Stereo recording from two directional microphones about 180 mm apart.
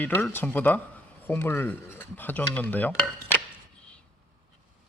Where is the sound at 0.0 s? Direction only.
10° left (ahead or behind).